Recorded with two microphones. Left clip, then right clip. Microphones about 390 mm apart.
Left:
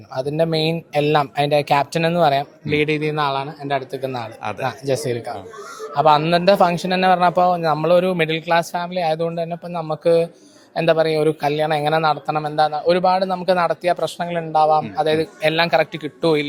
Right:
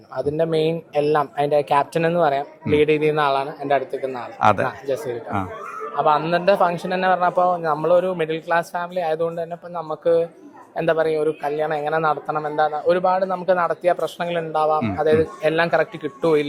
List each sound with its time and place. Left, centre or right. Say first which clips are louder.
0.2 s speech: even; left
4.4 s speech: right 11 dB; centre
4.6 s a man's voice: left 2 dB; left